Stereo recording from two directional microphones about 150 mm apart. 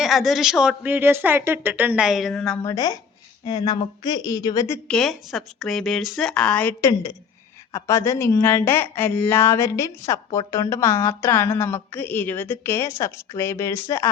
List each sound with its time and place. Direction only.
0.0 s speech: centre (ahead or behind)
2.6 s speech: 25° left (ahead or behind)
4.9 s speech: centre (ahead or behind)
6.8 s a woman's voice: 25° left (ahead or behind)